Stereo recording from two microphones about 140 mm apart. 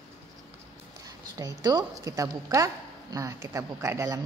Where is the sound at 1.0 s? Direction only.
25° right (ahead or behind).